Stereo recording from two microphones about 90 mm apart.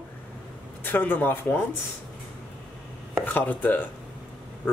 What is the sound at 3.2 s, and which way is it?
Speech, 20° left (ahead or behind).